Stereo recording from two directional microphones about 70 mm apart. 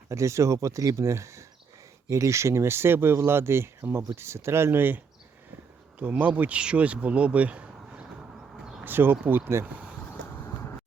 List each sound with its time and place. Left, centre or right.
0.1 s speech: right
6.0 s speech: right
8.8 s speech: right
10.2 s vehicle: left